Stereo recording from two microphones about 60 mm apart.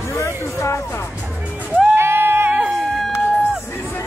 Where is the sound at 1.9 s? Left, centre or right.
Right.